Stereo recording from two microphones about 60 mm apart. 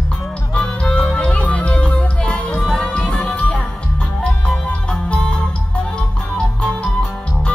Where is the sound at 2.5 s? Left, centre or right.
Centre.